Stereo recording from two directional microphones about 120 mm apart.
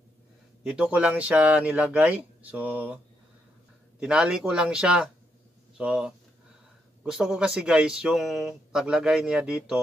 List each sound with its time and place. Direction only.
0.7 s speech: 5° right (ahead or behind)
4.0 s speech: 5° right (ahead or behind)